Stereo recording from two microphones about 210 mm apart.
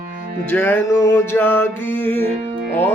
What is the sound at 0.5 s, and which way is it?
Music, 10° left (ahead or behind).